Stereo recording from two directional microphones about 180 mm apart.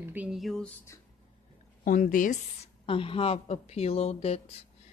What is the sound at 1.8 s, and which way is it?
Speech, 50° left (ahead or behind).